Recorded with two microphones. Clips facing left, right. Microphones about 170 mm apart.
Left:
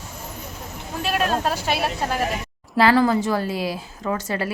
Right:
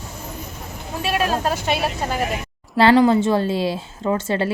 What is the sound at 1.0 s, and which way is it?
A woman's voice, 5° right (ahead or behind).